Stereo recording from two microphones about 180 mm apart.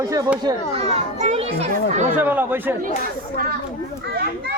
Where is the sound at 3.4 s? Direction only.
50° right (ahead or behind).